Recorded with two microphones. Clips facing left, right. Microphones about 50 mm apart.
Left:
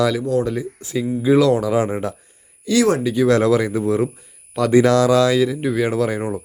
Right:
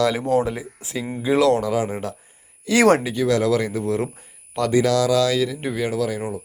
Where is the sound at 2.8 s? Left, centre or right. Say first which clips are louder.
Right 2 dB; right.